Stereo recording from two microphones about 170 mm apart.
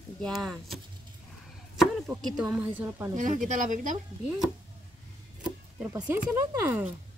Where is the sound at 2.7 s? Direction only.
15° right (ahead or behind).